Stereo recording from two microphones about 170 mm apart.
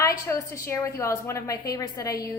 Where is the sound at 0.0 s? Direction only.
15° left (ahead or behind).